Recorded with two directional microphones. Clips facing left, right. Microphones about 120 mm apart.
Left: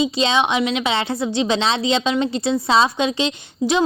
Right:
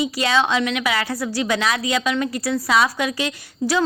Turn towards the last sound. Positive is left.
turn(degrees=20)  # may be behind; listen again after turning